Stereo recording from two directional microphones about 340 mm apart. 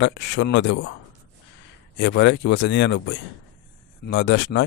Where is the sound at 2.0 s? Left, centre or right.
Left.